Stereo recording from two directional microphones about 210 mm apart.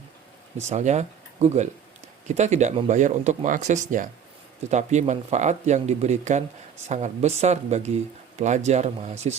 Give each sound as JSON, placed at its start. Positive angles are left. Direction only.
{"t": 0.6, "sound": "speech", "side_deg": -35}